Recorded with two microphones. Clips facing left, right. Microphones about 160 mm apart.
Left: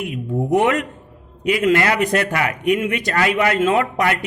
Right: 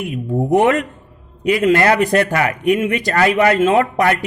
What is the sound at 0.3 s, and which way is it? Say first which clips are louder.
A man's voice: right 3 dB; 35° right (ahead or behind).